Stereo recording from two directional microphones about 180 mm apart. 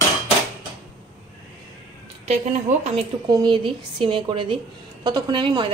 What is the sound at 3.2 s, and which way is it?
A woman's voice, 25° right (ahead or behind).